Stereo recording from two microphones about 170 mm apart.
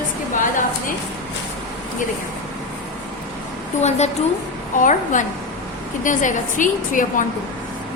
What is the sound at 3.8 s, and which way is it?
A woman's voice, 40° left (ahead or behind).